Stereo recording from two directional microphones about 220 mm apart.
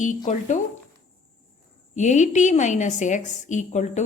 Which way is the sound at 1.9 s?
30° left (ahead or behind).